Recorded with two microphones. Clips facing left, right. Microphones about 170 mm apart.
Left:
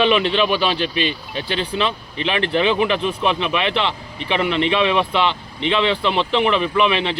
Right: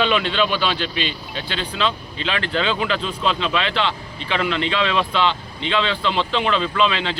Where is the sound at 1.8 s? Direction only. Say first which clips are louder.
Left 1 dB; 25° left (ahead or behind).